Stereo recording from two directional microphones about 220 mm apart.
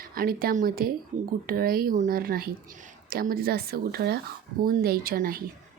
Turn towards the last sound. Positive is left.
turn(degrees=-40)  # may be behind; listen again after turning